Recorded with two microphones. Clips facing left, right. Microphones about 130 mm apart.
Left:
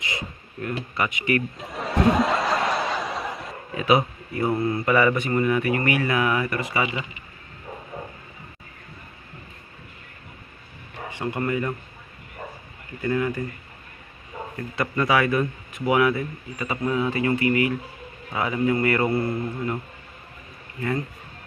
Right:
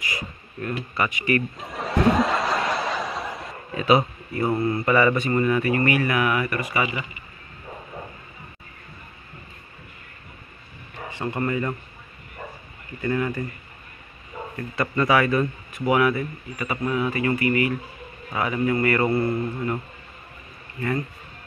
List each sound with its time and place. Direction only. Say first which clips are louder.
0.0 s a sound: even; 20° left (ahead or behind)
0.9 s speech: right 1 dB; 15° left (ahead or behind)
1.7 s laughter: even; centre (ahead or behind)
3.7 s speech: right 1 dB; 10° left (ahead or behind)
11.1 s speech: even; 15° left (ahead or behind)
13.0 s speech: left 1 dB; 5° left (ahead or behind)
14.8 s speech: right 1 dB; 15° left (ahead or behind)